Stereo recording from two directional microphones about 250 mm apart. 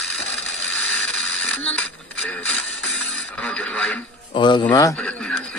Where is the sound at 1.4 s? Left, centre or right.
Centre.